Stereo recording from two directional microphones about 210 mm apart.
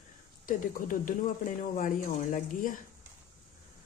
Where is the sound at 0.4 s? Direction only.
40° left (ahead or behind).